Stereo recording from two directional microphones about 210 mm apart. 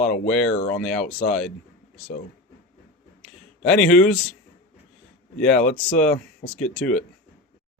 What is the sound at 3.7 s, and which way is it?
Speech, 5° left (ahead or behind).